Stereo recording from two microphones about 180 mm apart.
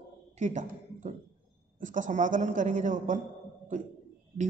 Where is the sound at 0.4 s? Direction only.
40° right (ahead or behind).